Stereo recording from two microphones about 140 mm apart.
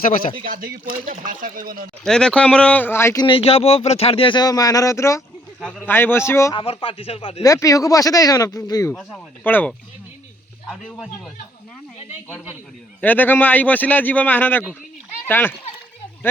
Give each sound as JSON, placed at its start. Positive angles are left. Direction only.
{"t": 0.4, "sound": "speech", "side_deg": -90}
{"t": 1.1, "sound": "speech", "side_deg": -75}
{"t": 2.0, "sound": "a man's voice", "side_deg": 5}
{"t": 3.2, "sound": "speech", "side_deg": 45}
{"t": 5.5, "sound": "speech", "side_deg": 0}
{"t": 5.9, "sound": "a man's voice", "side_deg": 15}
{"t": 6.5, "sound": "speech", "side_deg": 40}
{"t": 7.4, "sound": "speech", "side_deg": 25}
{"t": 9.0, "sound": "a man's voice", "side_deg": 10}
{"t": 10.7, "sound": "speech", "side_deg": 0}
{"t": 13.0, "sound": "a man's voice", "side_deg": 15}